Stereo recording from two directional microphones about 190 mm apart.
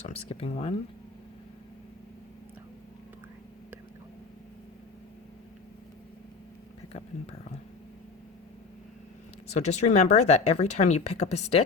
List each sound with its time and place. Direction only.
0.3 s speech: 30° left (ahead or behind)
9.6 s speech: 35° left (ahead or behind)